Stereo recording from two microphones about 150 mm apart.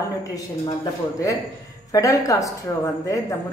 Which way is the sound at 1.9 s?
20° left (ahead or behind).